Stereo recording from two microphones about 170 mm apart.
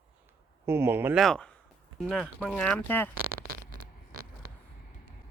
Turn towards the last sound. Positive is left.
turn(degrees=-60)  # may be behind; listen again after turning